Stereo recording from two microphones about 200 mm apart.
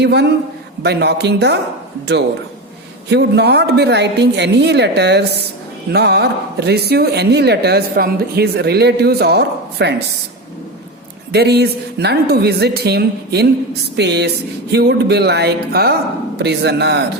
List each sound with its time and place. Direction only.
0.0 s speech: 55° right (ahead or behind)
3.1 s speech: 55° right (ahead or behind)
11.3 s a woman's voice: 55° right (ahead or behind)